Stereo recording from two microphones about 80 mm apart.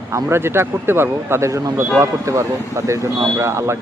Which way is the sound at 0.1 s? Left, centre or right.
Right.